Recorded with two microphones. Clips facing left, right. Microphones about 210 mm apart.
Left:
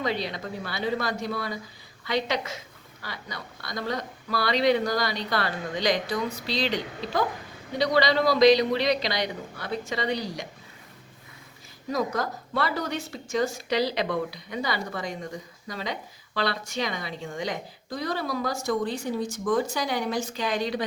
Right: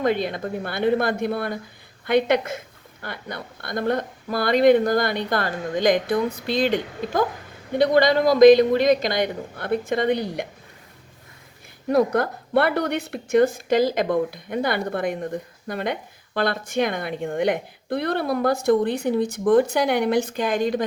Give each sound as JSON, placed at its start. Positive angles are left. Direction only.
{"t": 0.0, "sound": "a woman's voice", "side_deg": -50}
{"t": 11.9, "sound": "a woman's voice", "side_deg": -60}